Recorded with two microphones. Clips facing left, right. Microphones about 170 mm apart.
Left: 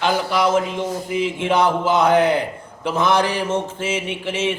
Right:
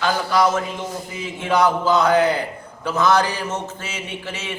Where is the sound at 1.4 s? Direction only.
25° left (ahead or behind).